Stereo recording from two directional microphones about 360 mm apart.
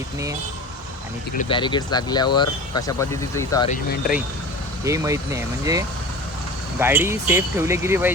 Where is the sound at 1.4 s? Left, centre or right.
Centre.